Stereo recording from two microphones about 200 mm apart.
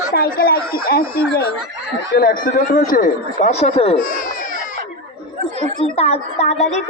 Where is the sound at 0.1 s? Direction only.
50° left (ahead or behind); by 3.9 s 30° left (ahead or behind).